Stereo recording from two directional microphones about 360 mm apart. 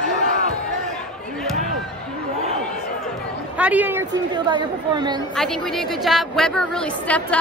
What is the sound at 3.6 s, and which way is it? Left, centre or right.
Speech, centre.